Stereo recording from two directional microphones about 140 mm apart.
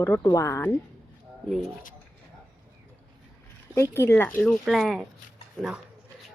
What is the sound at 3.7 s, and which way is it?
Speech, 20° left (ahead or behind).